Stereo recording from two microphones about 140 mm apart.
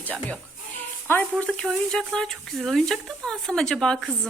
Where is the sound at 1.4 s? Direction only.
5° left (ahead or behind).